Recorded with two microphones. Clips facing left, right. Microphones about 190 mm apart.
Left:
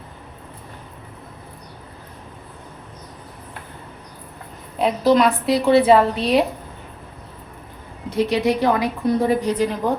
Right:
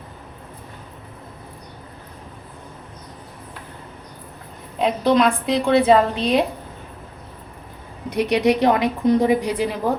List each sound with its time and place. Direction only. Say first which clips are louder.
4.8 s a woman's voice: left 1 dB; 5° left (ahead or behind)
8.1 s a woman's voice: right 1 dB; 15° right (ahead or behind)